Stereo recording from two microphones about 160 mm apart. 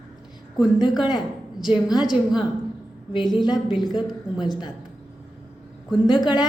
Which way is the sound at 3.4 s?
25° left (ahead or behind).